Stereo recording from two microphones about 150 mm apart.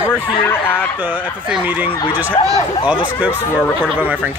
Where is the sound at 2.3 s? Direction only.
45° left (ahead or behind).